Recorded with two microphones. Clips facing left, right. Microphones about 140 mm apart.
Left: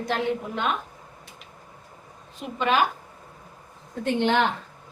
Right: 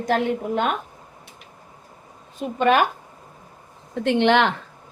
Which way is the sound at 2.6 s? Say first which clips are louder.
Right 4 dB; 55° right (ahead or behind).